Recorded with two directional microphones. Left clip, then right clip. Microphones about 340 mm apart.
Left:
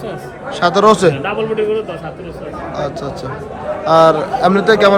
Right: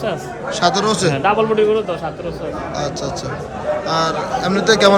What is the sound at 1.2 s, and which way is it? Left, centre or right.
Speech, right.